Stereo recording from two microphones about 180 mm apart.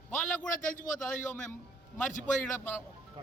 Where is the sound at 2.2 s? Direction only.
5° left (ahead or behind).